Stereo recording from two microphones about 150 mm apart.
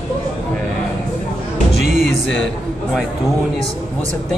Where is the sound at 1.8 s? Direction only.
50° right (ahead or behind).